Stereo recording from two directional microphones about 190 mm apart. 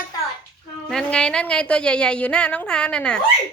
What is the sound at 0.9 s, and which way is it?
A woman's voice, 5° left (ahead or behind).